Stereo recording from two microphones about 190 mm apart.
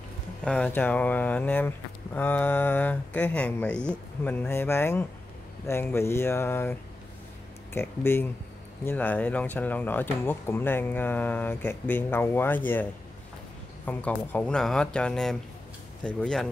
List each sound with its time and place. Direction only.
0.5 s speech: 5° left (ahead or behind)
13.8 s speech: 5° left (ahead or behind)